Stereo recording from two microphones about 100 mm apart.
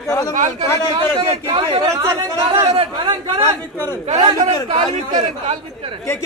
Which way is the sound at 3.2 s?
65° right (ahead or behind).